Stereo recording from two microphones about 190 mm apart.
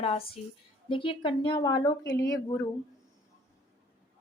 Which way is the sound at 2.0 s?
65° left (ahead or behind).